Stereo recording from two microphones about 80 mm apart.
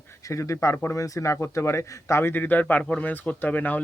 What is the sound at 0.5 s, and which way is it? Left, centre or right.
A man's voice, left.